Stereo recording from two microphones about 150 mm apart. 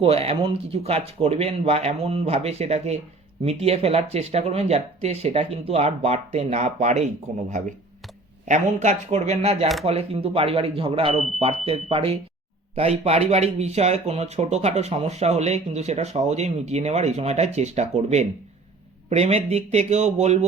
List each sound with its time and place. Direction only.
0.0 s speech: 40° right (ahead or behind)
8.4 s speech: 55° right (ahead or behind)